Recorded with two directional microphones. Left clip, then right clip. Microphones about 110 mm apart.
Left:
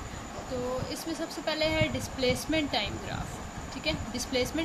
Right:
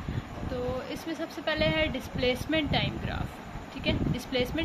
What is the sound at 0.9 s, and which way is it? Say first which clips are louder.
Speech: even; 10° left (ahead or behind).